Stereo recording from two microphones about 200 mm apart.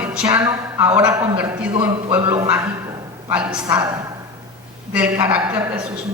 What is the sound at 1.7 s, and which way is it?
Speech, 25° right (ahead or behind).